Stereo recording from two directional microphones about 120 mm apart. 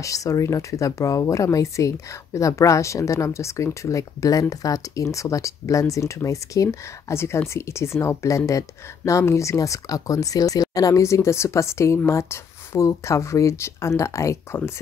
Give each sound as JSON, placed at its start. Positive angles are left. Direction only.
{"t": 0.0, "sound": "speech", "side_deg": 30}